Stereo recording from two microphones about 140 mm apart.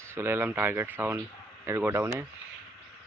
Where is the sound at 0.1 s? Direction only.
15° right (ahead or behind).